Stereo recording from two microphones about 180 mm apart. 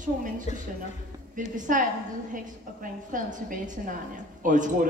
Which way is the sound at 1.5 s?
45° right (ahead or behind).